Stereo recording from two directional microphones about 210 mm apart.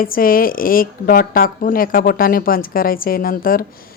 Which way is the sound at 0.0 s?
40° left (ahead or behind).